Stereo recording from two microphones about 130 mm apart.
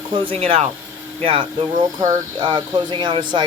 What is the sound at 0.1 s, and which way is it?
Speech, 45° right (ahead or behind).